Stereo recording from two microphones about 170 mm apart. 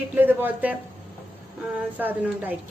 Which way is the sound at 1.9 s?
10° right (ahead or behind).